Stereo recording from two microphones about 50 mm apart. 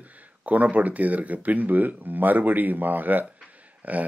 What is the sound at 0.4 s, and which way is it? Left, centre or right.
Speech, right.